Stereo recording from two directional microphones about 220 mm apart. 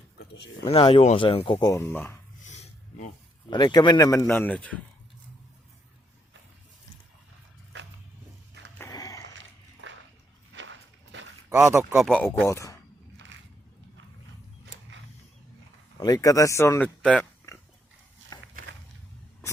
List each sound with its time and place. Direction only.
0.7 s speech: 25° left (ahead or behind)
1.5 s a man's voice: 15° left (ahead or behind)
2.5 s a sound: 35° left (ahead or behind)
3.5 s a man's voice: 20° left (ahead or behind)
8.8 s a sound: 15° left (ahead or behind)
9.4 s dog: 60° right (ahead or behind)
10.5 s walk: 55° right (ahead or behind)
11.4 s speech: 10° right (ahead or behind)
12.0 s a man's voice: 5° left (ahead or behind)
14.6 s mechanisms: 55° right (ahead or behind)
16.0 s speech: 15° left (ahead or behind)
18.3 s a sound: 15° left (ahead or behind)